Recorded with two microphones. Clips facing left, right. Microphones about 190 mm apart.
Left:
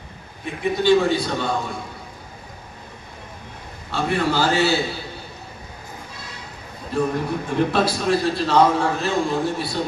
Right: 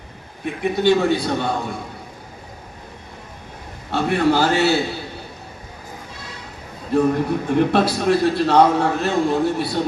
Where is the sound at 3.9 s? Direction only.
55° right (ahead or behind).